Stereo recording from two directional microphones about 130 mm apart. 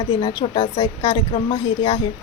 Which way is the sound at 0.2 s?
35° left (ahead or behind).